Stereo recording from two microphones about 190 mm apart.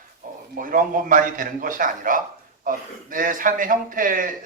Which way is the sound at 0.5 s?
45° right (ahead or behind).